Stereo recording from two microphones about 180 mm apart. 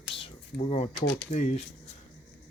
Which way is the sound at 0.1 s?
30° left (ahead or behind).